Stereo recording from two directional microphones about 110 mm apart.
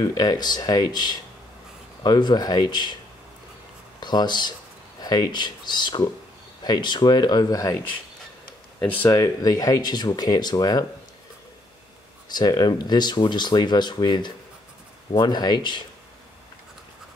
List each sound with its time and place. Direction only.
0.0 s speech: 35° left (ahead or behind)
4.0 s speech: 40° left (ahead or behind)
8.8 s speech: 15° left (ahead or behind)
9.1 s speech: 30° left (ahead or behind)
12.4 s speech: 40° left (ahead or behind)